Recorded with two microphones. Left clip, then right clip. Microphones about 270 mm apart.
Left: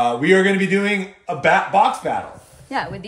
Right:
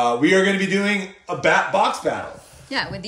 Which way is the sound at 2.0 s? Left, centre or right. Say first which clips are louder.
Left 1 dB; left.